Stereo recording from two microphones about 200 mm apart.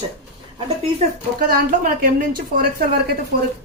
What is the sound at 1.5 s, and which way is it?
Speech, 45° right (ahead or behind).